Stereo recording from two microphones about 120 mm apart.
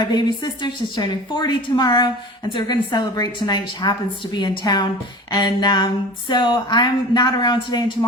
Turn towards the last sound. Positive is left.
turn(degrees=40)  # may be behind; listen again after turning